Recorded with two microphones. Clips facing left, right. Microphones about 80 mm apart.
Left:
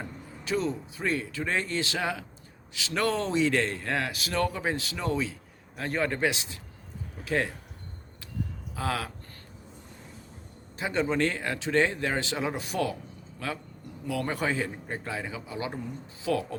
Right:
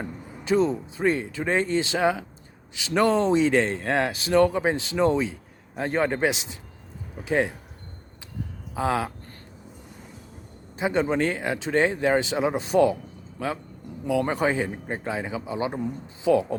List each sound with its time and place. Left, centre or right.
0.0 s speech: right
8.7 s speech: right
10.8 s speech: right
14.1 s speech: right